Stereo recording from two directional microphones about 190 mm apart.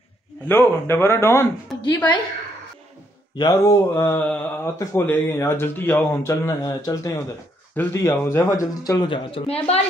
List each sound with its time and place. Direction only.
0.5 s speech: 10° left (ahead or behind)
3.3 s speech: 20° left (ahead or behind)